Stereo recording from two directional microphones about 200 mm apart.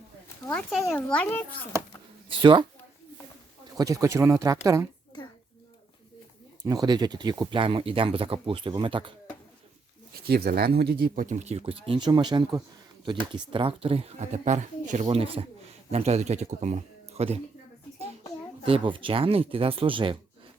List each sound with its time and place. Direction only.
0.7 s a child's voice: centre (ahead or behind)
2.4 s speech: 25° right (ahead or behind)
3.8 s speech: 15° right (ahead or behind)
6.6 s speech: 20° right (ahead or behind)
10.2 s speech: 50° right (ahead or behind); by 17.4 s 30° right (ahead or behind)
18.6 s speech: 25° right (ahead or behind)